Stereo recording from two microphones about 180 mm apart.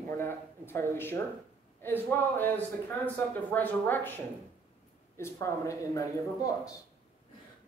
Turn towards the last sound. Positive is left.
turn(degrees=20)  # may be behind; listen again after turning